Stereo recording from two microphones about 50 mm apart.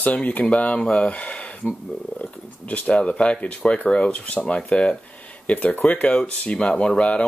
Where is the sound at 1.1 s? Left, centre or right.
Left.